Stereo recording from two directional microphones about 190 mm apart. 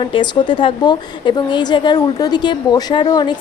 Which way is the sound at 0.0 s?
25° left (ahead or behind).